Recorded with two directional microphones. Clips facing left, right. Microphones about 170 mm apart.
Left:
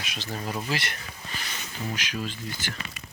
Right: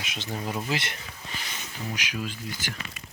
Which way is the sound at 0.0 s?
20° right (ahead or behind).